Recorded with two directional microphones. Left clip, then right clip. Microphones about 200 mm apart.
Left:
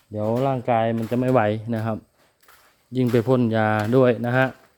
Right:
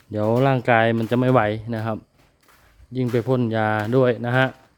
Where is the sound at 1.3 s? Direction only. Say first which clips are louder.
Right 1 dB; centre (ahead or behind).